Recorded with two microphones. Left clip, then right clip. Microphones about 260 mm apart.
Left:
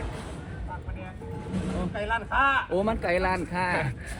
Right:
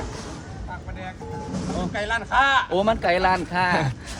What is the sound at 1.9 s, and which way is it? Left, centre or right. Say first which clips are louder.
Speech: right 4 dB; left.